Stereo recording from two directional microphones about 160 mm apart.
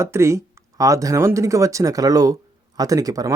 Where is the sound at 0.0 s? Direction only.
15° right (ahead or behind).